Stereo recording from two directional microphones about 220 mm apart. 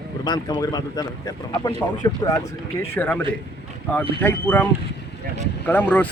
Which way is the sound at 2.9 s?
10° left (ahead or behind).